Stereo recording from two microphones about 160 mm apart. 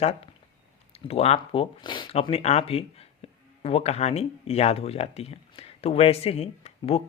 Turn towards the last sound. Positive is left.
turn(degrees=40)  # may be behind; listen again after turning